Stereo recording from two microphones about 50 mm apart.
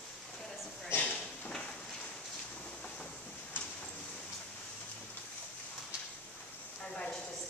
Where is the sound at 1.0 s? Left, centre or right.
Left.